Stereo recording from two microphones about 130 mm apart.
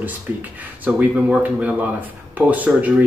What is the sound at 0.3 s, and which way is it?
Speech, 15° right (ahead or behind).